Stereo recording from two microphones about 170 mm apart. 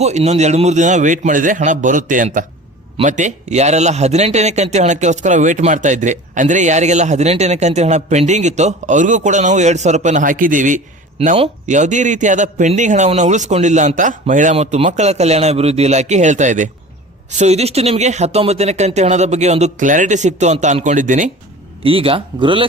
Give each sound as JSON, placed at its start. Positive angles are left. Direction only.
{"t": 0.0, "sound": "speech", "side_deg": -40}
{"t": 21.8, "sound": "speech", "side_deg": -35}